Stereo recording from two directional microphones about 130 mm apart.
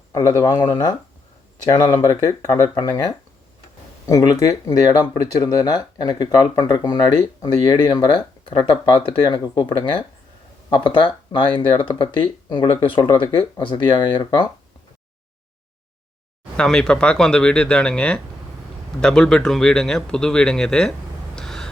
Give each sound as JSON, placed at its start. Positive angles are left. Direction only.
{"t": 0.1, "sound": "speech", "side_deg": 25}
{"t": 1.7, "sound": "speech", "side_deg": 35}
{"t": 16.6, "sound": "speech", "side_deg": 5}
{"t": 21.3, "sound": "gasp", "side_deg": 5}